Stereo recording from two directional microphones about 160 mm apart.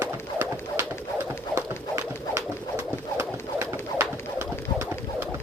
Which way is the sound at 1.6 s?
20° right (ahead or behind).